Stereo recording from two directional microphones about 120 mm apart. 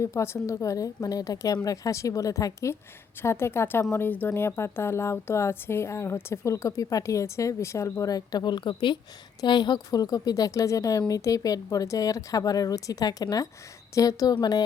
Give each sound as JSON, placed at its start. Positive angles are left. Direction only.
{"t": 0.0, "sound": "a woman's voice", "side_deg": 25}